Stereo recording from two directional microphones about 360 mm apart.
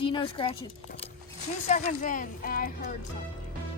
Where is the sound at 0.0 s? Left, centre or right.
Centre.